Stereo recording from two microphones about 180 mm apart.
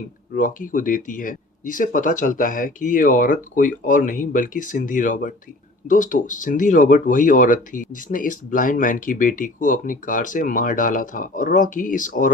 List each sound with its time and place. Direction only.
0.3 s speech: 45° left (ahead or behind)